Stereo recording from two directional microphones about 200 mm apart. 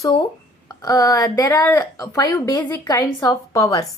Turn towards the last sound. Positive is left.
turn(degrees=15)  # may be behind; listen again after turning